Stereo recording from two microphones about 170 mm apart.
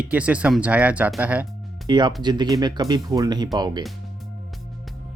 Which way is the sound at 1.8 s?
25° right (ahead or behind).